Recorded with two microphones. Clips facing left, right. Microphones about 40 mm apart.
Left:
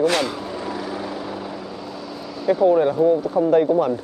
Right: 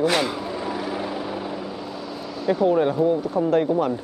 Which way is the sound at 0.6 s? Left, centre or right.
Centre.